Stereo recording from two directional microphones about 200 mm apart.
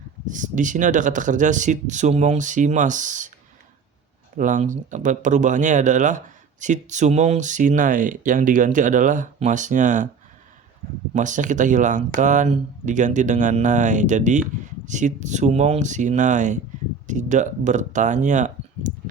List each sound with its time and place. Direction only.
0.3 s speech: 40° right (ahead or behind)
4.4 s speech: 40° right (ahead or behind)
11.1 s speech: 40° right (ahead or behind)